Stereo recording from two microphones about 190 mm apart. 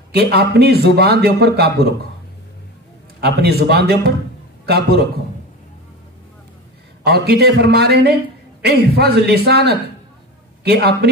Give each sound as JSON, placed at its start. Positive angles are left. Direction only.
{"t": 0.1, "sound": "a man's voice", "side_deg": -55}
{"t": 3.2, "sound": "a man's voice", "side_deg": -60}
{"t": 7.0, "sound": "a man's voice", "side_deg": -55}